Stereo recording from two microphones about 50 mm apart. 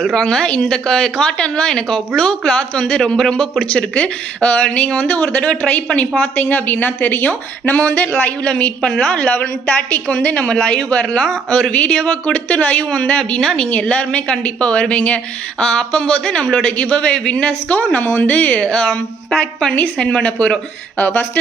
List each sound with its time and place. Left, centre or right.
0.0 s a woman's voice: centre
3.9 s a woman's voice: left
6.3 s a woman's voice: left
9.3 s a woman's voice: left
21.0 s a woman's voice: left